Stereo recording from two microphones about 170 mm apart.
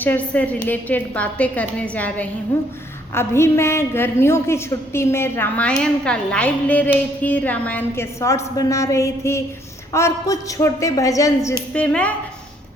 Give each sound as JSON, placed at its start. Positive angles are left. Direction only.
{"t": 0.0, "sound": "a woman's voice", "side_deg": 10}
{"t": 11.7, "sound": "a woman's voice", "side_deg": 5}